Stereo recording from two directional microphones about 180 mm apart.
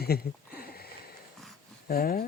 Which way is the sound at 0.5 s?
60° left (ahead or behind).